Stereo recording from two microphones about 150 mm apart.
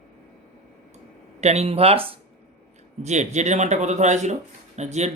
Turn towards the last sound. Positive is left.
turn(degrees=-50)  # may be behind; listen again after turning